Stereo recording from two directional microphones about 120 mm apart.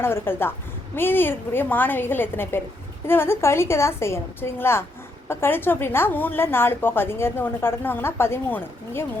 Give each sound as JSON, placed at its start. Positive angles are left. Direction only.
{"t": 0.0, "sound": "a woman's voice", "side_deg": 20}